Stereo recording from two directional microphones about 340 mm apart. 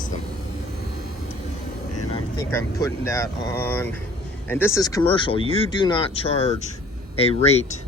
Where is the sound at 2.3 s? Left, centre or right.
Centre.